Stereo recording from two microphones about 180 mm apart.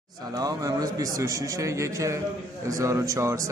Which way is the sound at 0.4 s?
20° right (ahead or behind).